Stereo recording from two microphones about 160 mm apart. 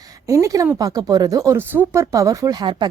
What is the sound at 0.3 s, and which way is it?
A woman's voice, 20° right (ahead or behind).